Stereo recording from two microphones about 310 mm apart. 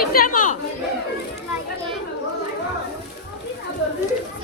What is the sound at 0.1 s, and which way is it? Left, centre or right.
Chatter, left.